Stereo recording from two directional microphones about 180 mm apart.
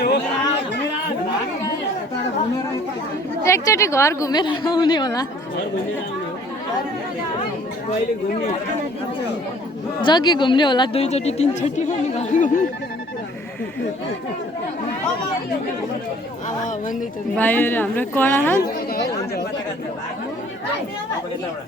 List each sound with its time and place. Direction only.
3.4 s a woman's voice: 15° left (ahead or behind)
10.0 s speech: 25° left (ahead or behind); by 12.6 s 45° left (ahead or behind)
17.3 s a woman's voice: 10° left (ahead or behind)